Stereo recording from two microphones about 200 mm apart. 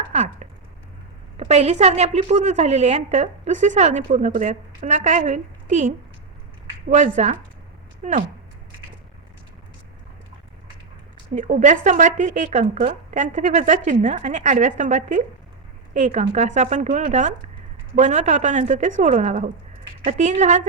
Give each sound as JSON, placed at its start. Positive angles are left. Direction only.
{"t": 0.1, "sound": "a sound", "side_deg": -35}
{"t": 1.4, "sound": "a woman's voice", "side_deg": -30}
{"t": 6.9, "sound": "a woman's voice", "side_deg": -35}
{"t": 11.3, "sound": "a woman's voice", "side_deg": -40}